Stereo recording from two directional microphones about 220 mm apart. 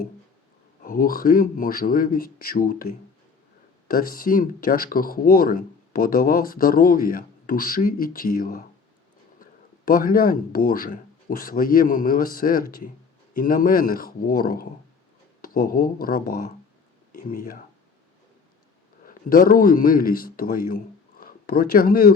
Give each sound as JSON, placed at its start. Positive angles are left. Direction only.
{"t": 0.8, "sound": "speech", "side_deg": 40}
{"t": 3.8, "sound": "speech", "side_deg": 40}
{"t": 19.0, "sound": "a man's voice", "side_deg": 40}